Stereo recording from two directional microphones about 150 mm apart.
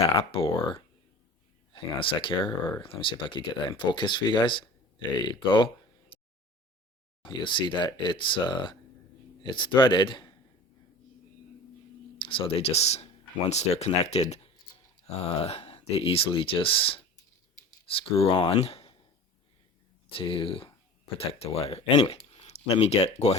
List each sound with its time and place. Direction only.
0.0 s speech: 40° left (ahead or behind)
7.3 s speech: 30° left (ahead or behind)
12.2 s speech: 35° left (ahead or behind)
20.1 s speech: 35° left (ahead or behind)